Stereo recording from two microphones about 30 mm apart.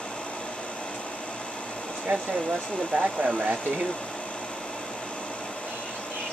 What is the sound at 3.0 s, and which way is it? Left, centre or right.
Speech, right.